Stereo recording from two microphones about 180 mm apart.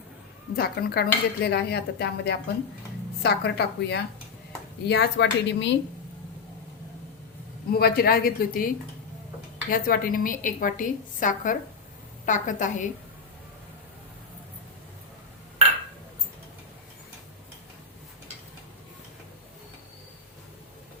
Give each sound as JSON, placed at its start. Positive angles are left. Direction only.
{"t": 0.5, "sound": "dishes", "side_deg": 55}
{"t": 4.9, "sound": "a woman's voice", "side_deg": 70}
{"t": 7.7, "sound": "dishes", "side_deg": 60}
{"t": 9.6, "sound": "a woman's voice", "side_deg": 50}